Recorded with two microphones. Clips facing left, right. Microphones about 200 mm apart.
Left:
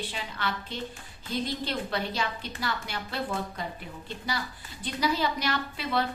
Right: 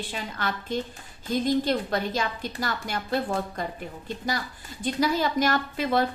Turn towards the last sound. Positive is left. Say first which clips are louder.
# right 5 dB
turn(degrees=-45)  # may be behind; listen again after turning